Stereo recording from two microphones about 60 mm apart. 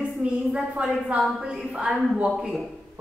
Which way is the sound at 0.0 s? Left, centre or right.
Centre.